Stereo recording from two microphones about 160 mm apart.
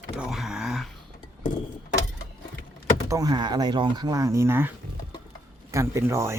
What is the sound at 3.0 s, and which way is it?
Speech, 20° right (ahead or behind).